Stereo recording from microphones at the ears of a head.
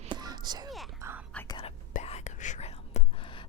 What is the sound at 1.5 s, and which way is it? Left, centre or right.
Whispering, left.